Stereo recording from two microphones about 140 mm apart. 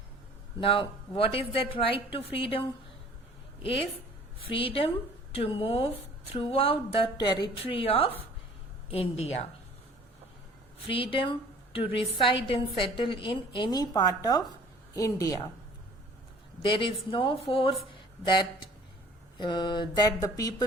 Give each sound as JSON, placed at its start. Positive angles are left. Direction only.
{"t": 0.6, "sound": "a woman's voice", "side_deg": 40}
{"t": 7.2, "sound": "a woman's voice", "side_deg": 30}
{"t": 10.9, "sound": "a woman's voice", "side_deg": 40}
{"t": 16.6, "sound": "a woman's voice", "side_deg": 35}